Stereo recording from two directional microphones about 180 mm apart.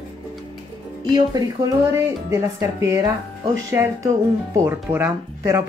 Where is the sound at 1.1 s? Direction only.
20° right (ahead or behind).